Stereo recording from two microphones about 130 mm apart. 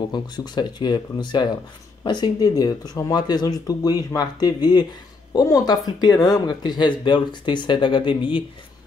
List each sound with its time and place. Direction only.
0.1 s speech: 35° left (ahead or behind)